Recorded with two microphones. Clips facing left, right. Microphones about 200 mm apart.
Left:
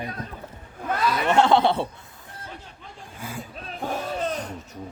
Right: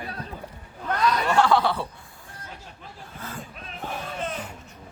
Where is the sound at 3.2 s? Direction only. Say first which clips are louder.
Left 2 dB; 10° left (ahead or behind).